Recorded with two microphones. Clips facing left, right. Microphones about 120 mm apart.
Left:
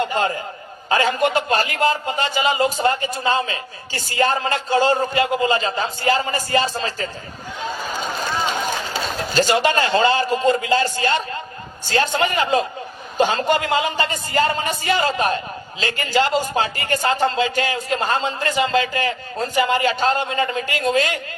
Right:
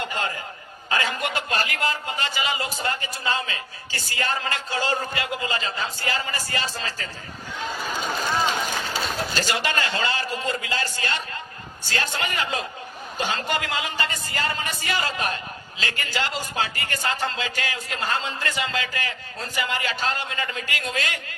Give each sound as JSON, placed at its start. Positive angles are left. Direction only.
{"t": 0.9, "sound": "speech", "side_deg": 30}
{"t": 9.4, "sound": "speech", "side_deg": 25}